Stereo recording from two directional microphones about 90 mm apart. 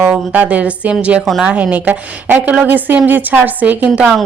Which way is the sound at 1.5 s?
15° right (ahead or behind).